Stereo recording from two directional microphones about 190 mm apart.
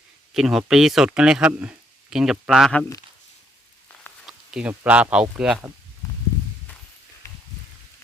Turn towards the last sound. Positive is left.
turn(degrees=15)  # may be behind; listen again after turning